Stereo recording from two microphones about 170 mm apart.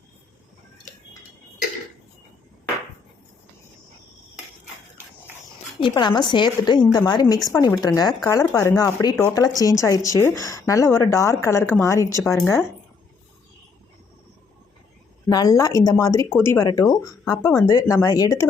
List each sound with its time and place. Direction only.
5.8 s speech: 25° left (ahead or behind)
15.3 s speech: 20° left (ahead or behind)